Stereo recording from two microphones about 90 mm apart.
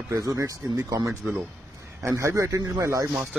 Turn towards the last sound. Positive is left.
turn(degrees=-35)  # may be behind; listen again after turning